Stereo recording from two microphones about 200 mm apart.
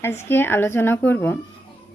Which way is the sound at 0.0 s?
10° left (ahead or behind).